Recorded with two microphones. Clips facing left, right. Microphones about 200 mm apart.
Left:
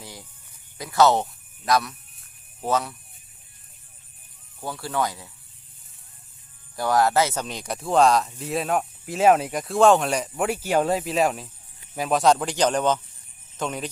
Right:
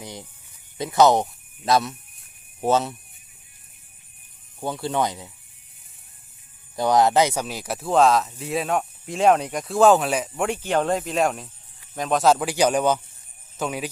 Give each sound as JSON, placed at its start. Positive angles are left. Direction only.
{"t": 0.0, "sound": "snake", "side_deg": -20}
{"t": 0.8, "sound": "speech", "side_deg": -20}
{"t": 4.6, "sound": "speech", "side_deg": -20}
{"t": 6.7, "sound": "speech", "side_deg": -20}
{"t": 7.4, "sound": "speech", "side_deg": -5}